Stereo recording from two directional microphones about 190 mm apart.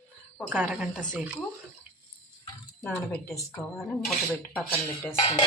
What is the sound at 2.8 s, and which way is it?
Speech, 5° left (ahead or behind).